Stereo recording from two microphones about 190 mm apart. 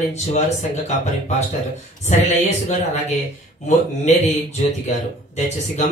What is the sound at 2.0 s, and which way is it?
Speech, 40° left (ahead or behind).